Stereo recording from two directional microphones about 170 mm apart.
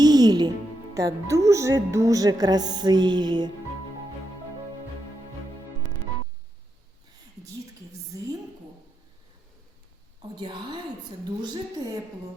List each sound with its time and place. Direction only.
0.0 s music: 25° right (ahead or behind)
0.9 s a woman's voice: 20° right (ahead or behind)
10.3 s a woman's voice: 25° right (ahead or behind)